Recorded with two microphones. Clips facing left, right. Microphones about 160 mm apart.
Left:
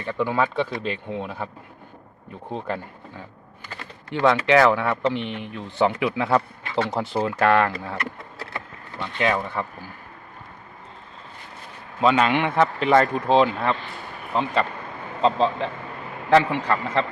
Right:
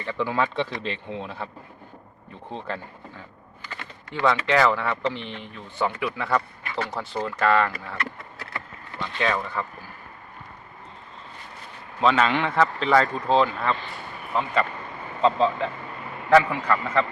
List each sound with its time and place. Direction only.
0.0 s speech: 10° left (ahead or behind)
2.5 s speech: 10° left (ahead or behind)
4.1 s speech: 65° left (ahead or behind)
4.4 s speech: 15° left (ahead or behind)
9.0 s speech: 15° left (ahead or behind)
11.9 s speech: 10° left (ahead or behind)
16.3 s speech: 25° left (ahead or behind)